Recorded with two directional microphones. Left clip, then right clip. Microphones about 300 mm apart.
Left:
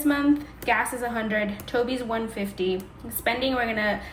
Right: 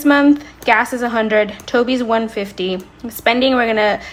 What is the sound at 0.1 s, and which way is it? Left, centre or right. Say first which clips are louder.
A woman's voice: right 12 dB; centre.